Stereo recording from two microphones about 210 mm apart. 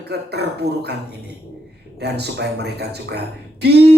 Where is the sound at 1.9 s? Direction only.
50° right (ahead or behind).